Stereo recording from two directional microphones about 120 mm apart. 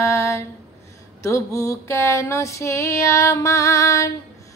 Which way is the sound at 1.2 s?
25° left (ahead or behind).